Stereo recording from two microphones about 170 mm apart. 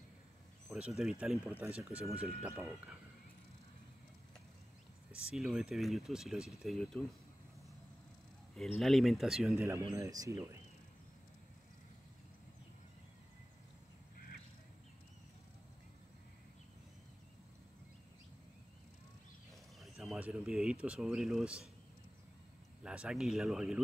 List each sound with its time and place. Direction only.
0.7 s speech: 5° right (ahead or behind)
5.1 s speech: centre (ahead or behind)
8.5 s speech: centre (ahead or behind)
9.6 s speech: 15° right (ahead or behind)
19.8 s a sound: centre (ahead or behind)
20.8 s speech: 5° right (ahead or behind)
22.8 s speech: 5° right (ahead or behind)